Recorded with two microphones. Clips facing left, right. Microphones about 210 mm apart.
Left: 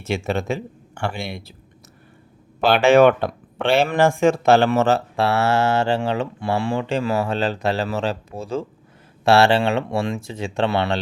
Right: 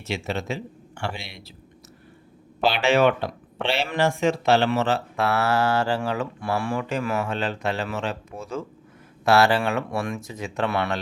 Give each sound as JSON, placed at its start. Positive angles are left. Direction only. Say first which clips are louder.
{"t": 0.0, "sound": "speech", "louder": "left 5 dB", "side_deg": 50}
{"t": 2.6, "sound": "speech", "louder": "left 6 dB", "side_deg": 50}